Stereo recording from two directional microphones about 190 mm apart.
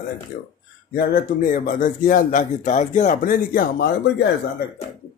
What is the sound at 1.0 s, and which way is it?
Speech, 50° left (ahead or behind).